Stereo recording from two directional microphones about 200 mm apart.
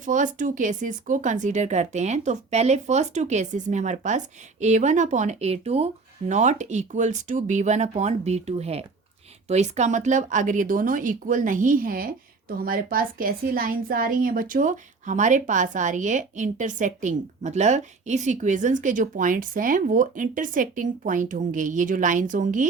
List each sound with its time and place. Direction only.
0.0 s speech: 40° right (ahead or behind)